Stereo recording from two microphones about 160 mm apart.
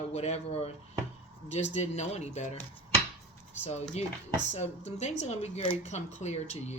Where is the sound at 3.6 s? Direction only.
40° left (ahead or behind).